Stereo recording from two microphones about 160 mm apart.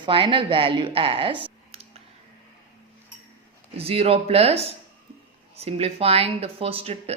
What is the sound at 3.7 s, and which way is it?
Speech, 40° right (ahead or behind).